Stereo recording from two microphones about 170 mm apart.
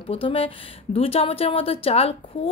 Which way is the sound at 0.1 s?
35° left (ahead or behind).